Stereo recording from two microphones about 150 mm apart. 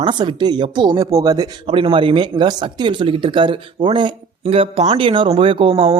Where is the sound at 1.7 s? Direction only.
35° right (ahead or behind).